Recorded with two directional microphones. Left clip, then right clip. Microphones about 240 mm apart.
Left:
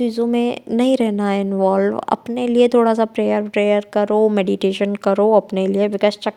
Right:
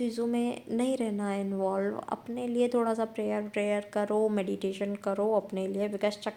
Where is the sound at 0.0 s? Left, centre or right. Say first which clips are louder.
Left 12 dB; left.